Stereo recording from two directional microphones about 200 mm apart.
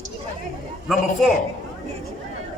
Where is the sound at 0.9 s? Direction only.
Centre (ahead or behind).